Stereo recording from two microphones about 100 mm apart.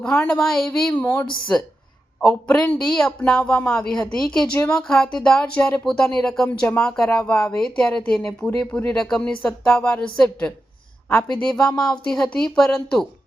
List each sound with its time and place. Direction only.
0.0 s speech: 10° left (ahead or behind)
1.0 s speech: 30° left (ahead or behind)
2.2 s speech: 10° left (ahead or behind)